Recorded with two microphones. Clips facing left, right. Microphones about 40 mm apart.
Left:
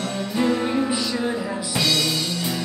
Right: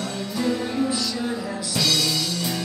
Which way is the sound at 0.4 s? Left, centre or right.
Left.